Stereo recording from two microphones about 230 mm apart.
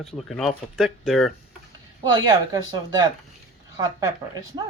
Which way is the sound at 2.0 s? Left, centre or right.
Centre.